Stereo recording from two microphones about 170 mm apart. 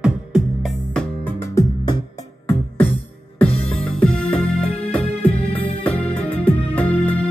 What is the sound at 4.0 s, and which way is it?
Music, 5° left (ahead or behind).